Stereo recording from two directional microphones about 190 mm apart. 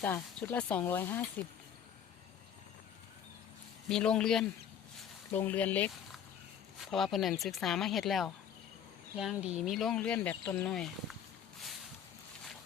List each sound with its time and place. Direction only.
0.0 s speech: 10° left (ahead or behind)
3.8 s speech: 5° left (ahead or behind)